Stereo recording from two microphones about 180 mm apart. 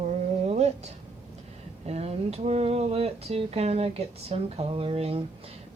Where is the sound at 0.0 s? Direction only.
35° right (ahead or behind).